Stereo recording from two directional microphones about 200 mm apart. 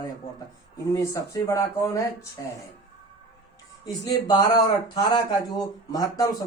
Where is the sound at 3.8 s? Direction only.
20° left (ahead or behind).